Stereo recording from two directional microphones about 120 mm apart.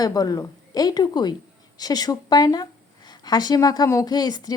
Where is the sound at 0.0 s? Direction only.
30° left (ahead or behind).